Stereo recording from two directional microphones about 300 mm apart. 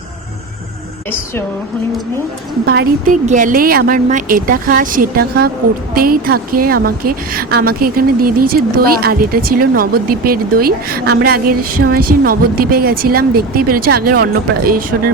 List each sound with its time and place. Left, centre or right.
2.6 s a woman's voice: right